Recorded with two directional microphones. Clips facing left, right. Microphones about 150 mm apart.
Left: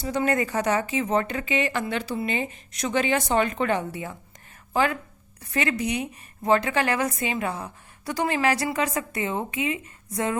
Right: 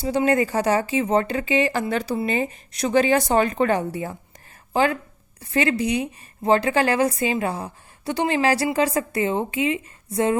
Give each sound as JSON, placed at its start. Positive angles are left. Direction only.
{"t": 0.0, "sound": "a woman's voice", "side_deg": -30}